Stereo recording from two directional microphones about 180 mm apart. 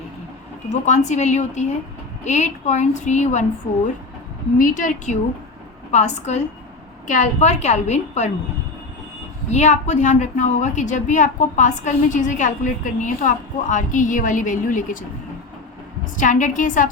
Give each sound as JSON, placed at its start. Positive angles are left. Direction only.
{"t": 0.7, "sound": "a woman's voice", "side_deg": 40}
{"t": 4.5, "sound": "a woman's voice", "side_deg": 50}
{"t": 9.5, "sound": "a woman's voice", "side_deg": 40}
{"t": 16.1, "sound": "a woman's voice", "side_deg": 45}